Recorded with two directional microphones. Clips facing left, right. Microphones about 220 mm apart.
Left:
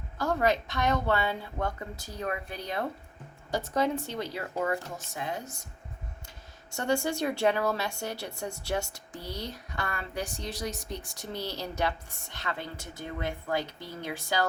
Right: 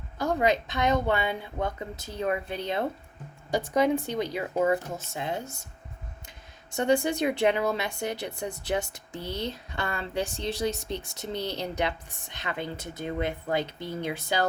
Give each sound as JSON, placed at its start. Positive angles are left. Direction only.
{"t": 0.2, "sound": "speech", "side_deg": -15}